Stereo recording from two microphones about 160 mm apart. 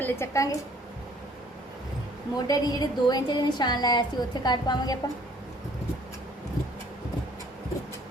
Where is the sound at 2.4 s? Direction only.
25° left (ahead or behind).